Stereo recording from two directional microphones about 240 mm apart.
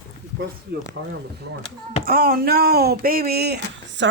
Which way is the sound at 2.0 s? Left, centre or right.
Right.